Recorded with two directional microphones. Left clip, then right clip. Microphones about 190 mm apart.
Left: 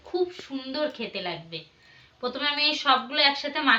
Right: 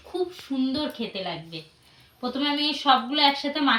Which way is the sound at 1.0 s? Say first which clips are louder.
Right 1 dB; 30° left (ahead or behind).